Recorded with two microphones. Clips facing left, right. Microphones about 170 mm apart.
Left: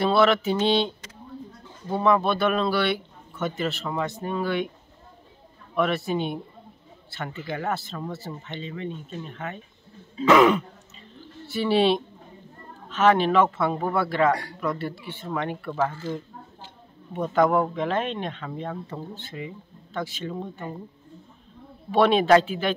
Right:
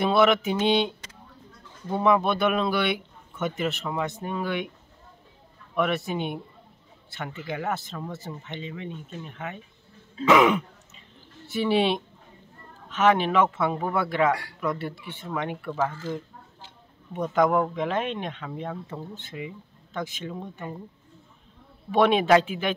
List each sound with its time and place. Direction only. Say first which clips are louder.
0.0 s a man's voice: left 1 dB; 15° right (ahead or behind)
2.0 s a man's voice: even; 15° right (ahead or behind)
5.8 s a man's voice: left 2 dB; 15° right (ahead or behind)
11.4 s a man's voice: left 2 dB; 20° right (ahead or behind)
17.1 s speech: left 1 dB; centre (ahead or behind)
17.7 s a man's voice: left 1 dB; 10° right (ahead or behind)
20.3 s speech: left 2 dB; 5° right (ahead or behind)
21.9 s a man's voice: left 1 dB; 15° right (ahead or behind)